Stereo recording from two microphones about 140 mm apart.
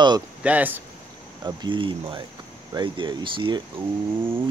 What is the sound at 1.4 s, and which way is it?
Speech, 35° right (ahead or behind).